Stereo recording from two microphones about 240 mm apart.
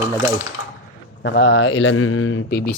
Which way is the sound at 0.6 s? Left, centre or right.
Left.